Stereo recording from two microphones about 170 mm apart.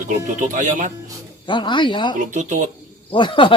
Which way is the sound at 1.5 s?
30° left (ahead or behind).